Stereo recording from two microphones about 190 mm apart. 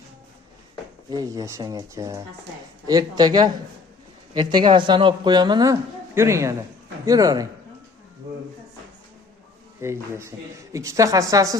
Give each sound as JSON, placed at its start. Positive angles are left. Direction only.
{"t": 1.1, "sound": "a woman's voice", "side_deg": -20}
{"t": 9.8, "sound": "a woman's voice", "side_deg": -15}